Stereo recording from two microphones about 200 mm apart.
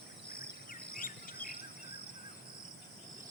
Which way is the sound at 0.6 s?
45° left (ahead or behind).